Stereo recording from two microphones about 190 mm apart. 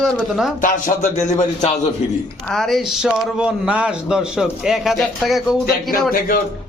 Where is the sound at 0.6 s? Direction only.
45° left (ahead or behind).